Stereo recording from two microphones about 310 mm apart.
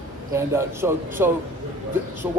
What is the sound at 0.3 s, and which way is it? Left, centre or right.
Speech, centre.